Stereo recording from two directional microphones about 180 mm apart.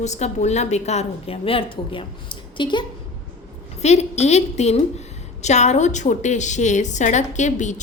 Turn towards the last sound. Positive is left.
turn(degrees=40)  # may be behind; listen again after turning